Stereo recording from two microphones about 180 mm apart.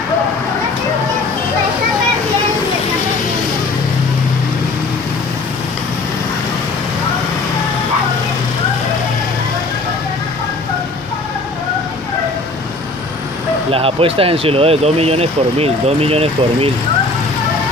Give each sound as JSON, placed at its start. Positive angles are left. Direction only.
{"t": 13.7, "sound": "speech", "side_deg": -30}